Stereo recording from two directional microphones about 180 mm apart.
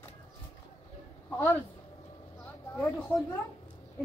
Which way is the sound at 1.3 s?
15° left (ahead or behind).